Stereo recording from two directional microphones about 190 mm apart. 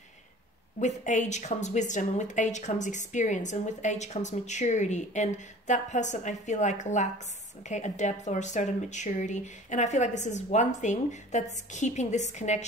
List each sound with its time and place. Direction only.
0.7 s a woman's voice: 40° left (ahead or behind)